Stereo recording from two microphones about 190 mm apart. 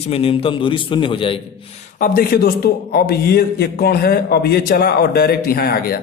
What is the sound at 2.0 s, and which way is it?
A man's voice, 45° left (ahead or behind).